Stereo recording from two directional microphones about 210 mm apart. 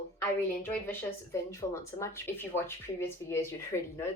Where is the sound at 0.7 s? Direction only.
10° left (ahead or behind).